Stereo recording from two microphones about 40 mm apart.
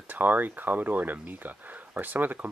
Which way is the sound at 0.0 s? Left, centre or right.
Right.